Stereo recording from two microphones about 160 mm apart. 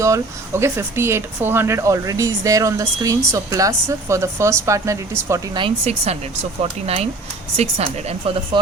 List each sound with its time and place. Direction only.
0.0 s speech: 15° right (ahead or behind)
5.5 s speech: 35° right (ahead or behind)